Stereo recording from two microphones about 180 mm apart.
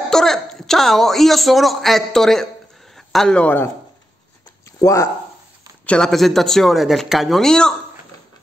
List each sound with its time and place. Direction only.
0.1 s a woman's voice: centre (ahead or behind)
4.7 s speech: 15° left (ahead or behind)
5.9 s a woman's voice: 5° left (ahead or behind)